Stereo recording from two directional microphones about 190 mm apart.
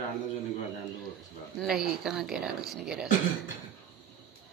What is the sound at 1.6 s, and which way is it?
Speech, centre (ahead or behind).